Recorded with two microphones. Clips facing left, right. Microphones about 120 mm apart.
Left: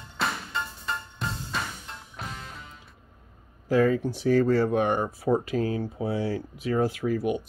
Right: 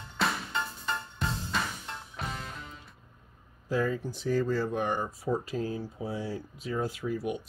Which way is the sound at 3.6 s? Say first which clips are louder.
Left 7 dB; 75° left (ahead or behind).